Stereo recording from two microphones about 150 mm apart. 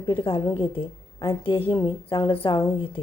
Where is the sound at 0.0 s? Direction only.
35° left (ahead or behind).